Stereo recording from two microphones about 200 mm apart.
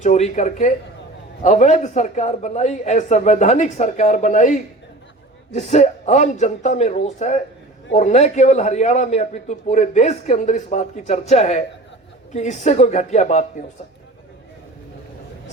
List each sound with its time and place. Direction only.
0.0 s a man's voice: 35° left (ahead or behind)